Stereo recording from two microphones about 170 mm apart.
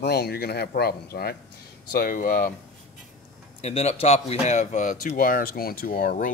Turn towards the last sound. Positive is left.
turn(degrees=60)  # may be behind; listen again after turning